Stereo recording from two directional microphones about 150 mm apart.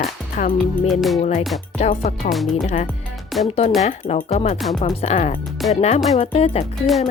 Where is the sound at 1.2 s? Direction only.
50° left (ahead or behind).